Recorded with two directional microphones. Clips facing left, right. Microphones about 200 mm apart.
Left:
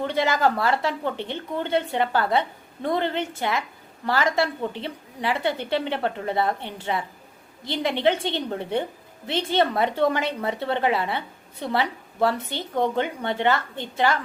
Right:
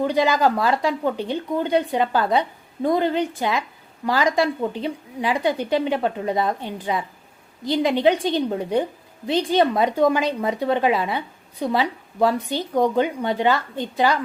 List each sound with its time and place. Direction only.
0.0 s a woman's voice: 15° right (ahead or behind)